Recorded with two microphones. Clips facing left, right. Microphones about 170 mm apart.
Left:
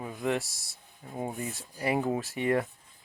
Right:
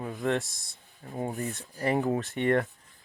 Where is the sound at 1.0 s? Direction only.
20° left (ahead or behind).